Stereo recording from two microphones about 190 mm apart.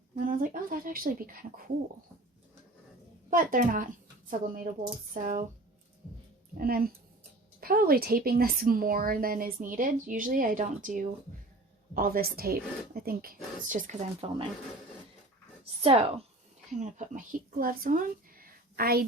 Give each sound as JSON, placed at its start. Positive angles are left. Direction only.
{"t": 0.3, "sound": "a woman's voice", "side_deg": -45}
{"t": 3.2, "sound": "a woman's voice", "side_deg": -45}
{"t": 6.6, "sound": "a woman's voice", "side_deg": -50}
{"t": 15.8, "sound": "a woman's voice", "side_deg": -30}
{"t": 17.6, "sound": "a woman's voice", "side_deg": -45}